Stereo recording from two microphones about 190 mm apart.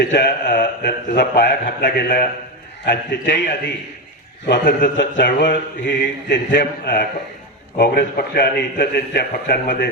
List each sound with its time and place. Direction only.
0.0 s speech: 60° left (ahead or behind)
0.4 s a sound: 50° left (ahead or behind)
1.1 s speech: 60° left (ahead or behind)
4.6 s speech: 50° left (ahead or behind)